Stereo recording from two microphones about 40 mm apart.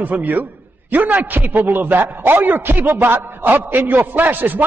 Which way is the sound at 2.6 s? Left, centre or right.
Right.